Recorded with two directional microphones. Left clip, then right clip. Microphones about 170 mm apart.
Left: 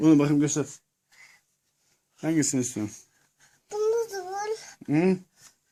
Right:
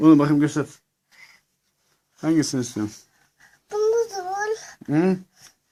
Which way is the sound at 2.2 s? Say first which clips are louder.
Right 4 dB; 20° left (ahead or behind).